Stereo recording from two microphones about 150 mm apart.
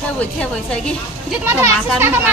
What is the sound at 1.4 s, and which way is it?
Speech, 15° right (ahead or behind).